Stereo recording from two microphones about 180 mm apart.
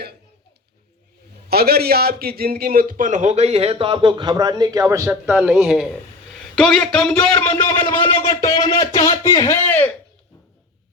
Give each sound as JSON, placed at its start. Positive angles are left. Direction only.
{"t": 1.5, "sound": "a man's voice", "side_deg": -60}
{"t": 5.5, "sound": "a man's voice", "side_deg": 0}
{"t": 7.5, "sound": "a man's voice", "side_deg": 25}
{"t": 9.2, "sound": "speech", "side_deg": 15}